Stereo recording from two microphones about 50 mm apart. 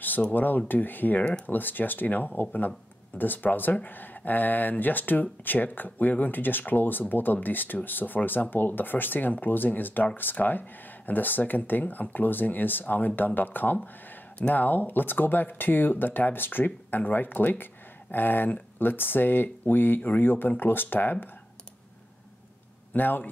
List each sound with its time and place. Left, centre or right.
0.3 s speech: left
22.9 s speech: left